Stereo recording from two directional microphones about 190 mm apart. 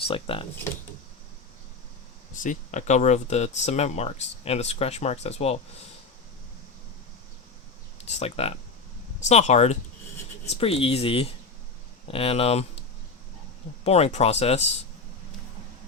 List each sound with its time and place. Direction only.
0.1 s speech: 30° left (ahead or behind)
2.3 s speech: 40° left (ahead or behind)
8.0 s speech: 35° left (ahead or behind)
13.8 s speech: 35° left (ahead or behind)